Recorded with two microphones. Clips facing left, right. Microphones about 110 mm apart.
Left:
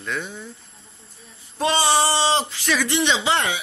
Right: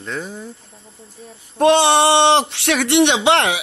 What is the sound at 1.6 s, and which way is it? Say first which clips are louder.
Speech: right 7 dB; 60° right (ahead or behind).